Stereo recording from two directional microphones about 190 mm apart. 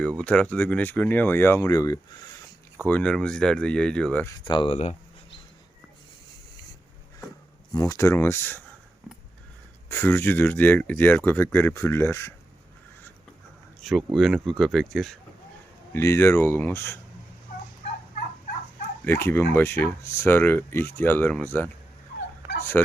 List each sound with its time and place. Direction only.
0.0 s speech: 5° left (ahead or behind)
2.8 s speech: 5° left (ahead or behind)
4.4 s speech: 25° left (ahead or behind)
7.7 s speech: 20° left (ahead or behind)
9.9 s speech: 10° left (ahead or behind)
13.8 s speech: centre (ahead or behind)
15.9 s speech: 15° left (ahead or behind)
19.0 s speech: 10° left (ahead or behind)